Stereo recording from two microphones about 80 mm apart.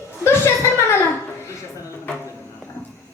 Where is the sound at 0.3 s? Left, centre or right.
Left.